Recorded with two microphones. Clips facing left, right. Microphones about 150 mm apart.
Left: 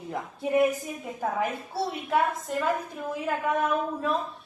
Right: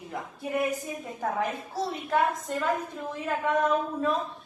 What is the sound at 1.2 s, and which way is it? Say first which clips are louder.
A woman's voice: left 1 dB; 5° left (ahead or behind).